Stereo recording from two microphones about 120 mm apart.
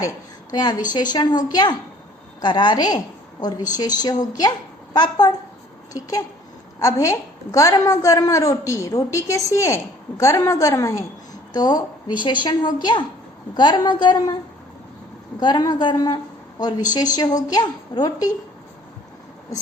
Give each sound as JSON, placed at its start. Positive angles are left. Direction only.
{"t": 0.5, "sound": "a woman's voice", "side_deg": 35}
{"t": 15.4, "sound": "a woman's voice", "side_deg": 40}